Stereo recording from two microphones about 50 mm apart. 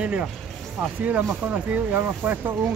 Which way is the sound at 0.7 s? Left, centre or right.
Right.